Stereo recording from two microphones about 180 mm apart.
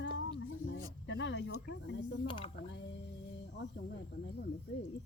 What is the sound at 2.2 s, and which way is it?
Speech, 30° left (ahead or behind).